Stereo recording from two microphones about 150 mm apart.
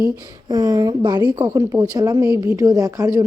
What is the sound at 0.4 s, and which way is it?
A woman's voice, 25° right (ahead or behind).